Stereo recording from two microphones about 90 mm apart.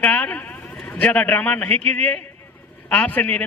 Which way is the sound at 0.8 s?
15° left (ahead or behind).